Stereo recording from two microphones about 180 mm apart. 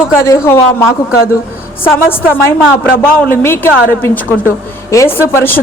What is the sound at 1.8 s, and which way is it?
Speech, 10° left (ahead or behind).